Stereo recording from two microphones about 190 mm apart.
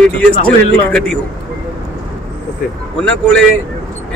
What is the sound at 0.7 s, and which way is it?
Speech, 5° left (ahead or behind).